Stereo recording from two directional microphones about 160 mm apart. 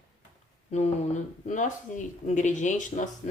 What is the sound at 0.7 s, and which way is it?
Speech, 45° left (ahead or behind).